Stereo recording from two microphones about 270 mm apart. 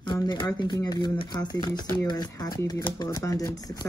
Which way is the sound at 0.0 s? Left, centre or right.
Centre.